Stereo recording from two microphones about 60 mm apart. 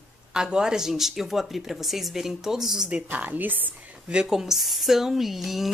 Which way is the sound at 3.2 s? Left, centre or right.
Right.